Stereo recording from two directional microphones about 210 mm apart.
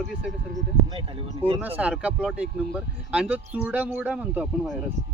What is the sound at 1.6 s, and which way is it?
Speech, 5° right (ahead or behind).